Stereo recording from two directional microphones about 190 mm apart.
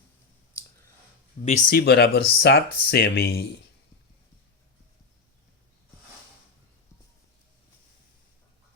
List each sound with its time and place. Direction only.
1.5 s speech: 45° left (ahead or behind)